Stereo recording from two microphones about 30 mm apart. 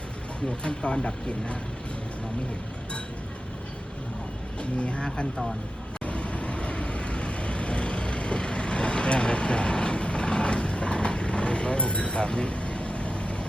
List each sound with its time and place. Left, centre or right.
0.4 s speech: left
4.8 s speech: left
6.1 s vehicle: left